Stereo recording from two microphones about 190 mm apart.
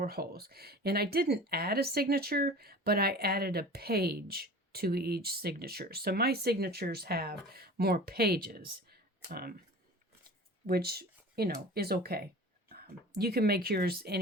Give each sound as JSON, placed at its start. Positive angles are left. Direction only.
{"t": 0.0, "sound": "speech", "side_deg": -55}
{"t": 10.7, "sound": "speech", "side_deg": -55}